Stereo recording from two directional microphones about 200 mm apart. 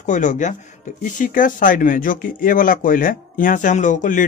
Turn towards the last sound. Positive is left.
turn(degrees=40)  # may be behind; listen again after turning